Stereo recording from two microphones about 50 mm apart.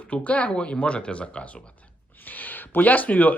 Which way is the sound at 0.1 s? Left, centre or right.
Left.